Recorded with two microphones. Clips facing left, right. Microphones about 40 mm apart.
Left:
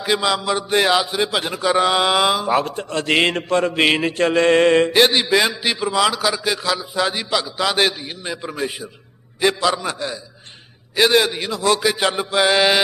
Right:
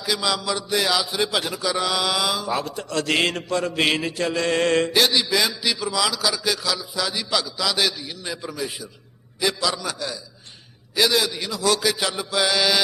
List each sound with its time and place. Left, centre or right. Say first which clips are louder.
0.0 s a man's voice: left 5 dB; left